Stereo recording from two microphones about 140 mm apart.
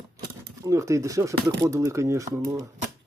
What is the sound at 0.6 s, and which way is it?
Speech, 20° right (ahead or behind).